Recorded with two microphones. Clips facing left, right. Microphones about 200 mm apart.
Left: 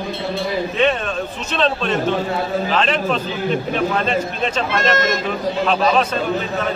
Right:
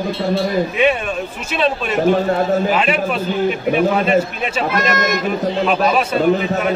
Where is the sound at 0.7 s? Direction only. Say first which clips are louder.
Right 2 dB; 10° right (ahead or behind).